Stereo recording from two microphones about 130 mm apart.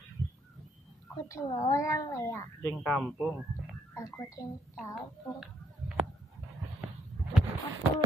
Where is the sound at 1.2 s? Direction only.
25° left (ahead or behind).